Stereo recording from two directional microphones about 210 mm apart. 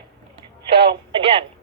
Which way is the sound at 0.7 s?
25° right (ahead or behind).